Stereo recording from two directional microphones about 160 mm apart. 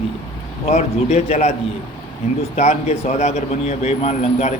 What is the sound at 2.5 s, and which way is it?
Speech, 45° left (ahead or behind).